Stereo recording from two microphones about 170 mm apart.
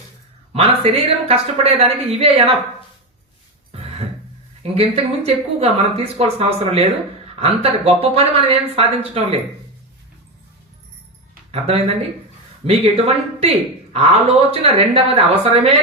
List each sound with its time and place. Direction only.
0.5 s speech: 35° right (ahead or behind)
4.6 s speech: 35° right (ahead or behind)
11.5 s speech: 35° right (ahead or behind)